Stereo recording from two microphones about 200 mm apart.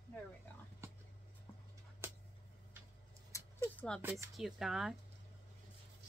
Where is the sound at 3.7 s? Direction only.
5° left (ahead or behind).